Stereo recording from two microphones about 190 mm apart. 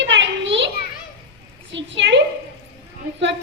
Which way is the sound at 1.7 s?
75° right (ahead or behind).